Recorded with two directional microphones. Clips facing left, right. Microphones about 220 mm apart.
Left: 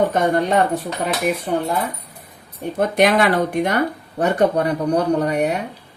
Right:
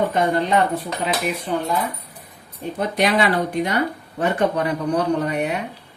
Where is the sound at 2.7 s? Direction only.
50° left (ahead or behind).